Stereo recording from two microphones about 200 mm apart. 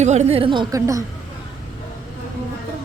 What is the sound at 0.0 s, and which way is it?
A woman's voice, 35° right (ahead or behind).